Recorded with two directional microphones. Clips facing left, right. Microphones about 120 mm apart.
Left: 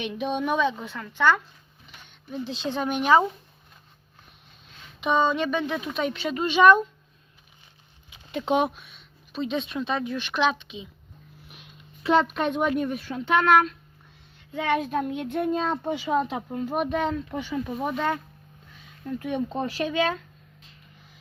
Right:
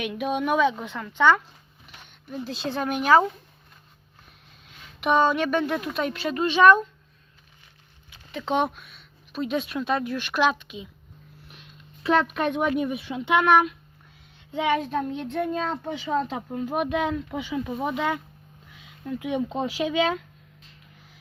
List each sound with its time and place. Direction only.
0.0 s speech: 5° right (ahead or behind)
2.6 s speech: 5° right (ahead or behind)
5.0 s speech: 10° right (ahead or behind)
8.1 s a sound: 20° left (ahead or behind)
8.5 s speech: 5° left (ahead or behind)
12.1 s speech: 5° right (ahead or behind)
14.7 s speech: 5° left (ahead or behind)
15.4 s speech: 20° left (ahead or behind); by 18.2 s 10° right (ahead or behind)
19.2 s speech: 10° right (ahead or behind)